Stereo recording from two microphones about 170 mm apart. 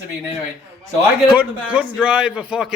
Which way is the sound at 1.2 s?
10° right (ahead or behind).